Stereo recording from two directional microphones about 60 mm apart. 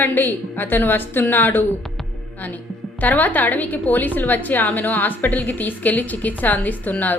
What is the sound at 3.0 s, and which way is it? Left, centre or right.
A woman's voice, left.